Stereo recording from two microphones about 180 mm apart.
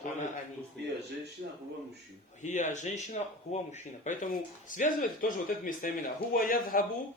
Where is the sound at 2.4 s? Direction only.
40° left (ahead or behind).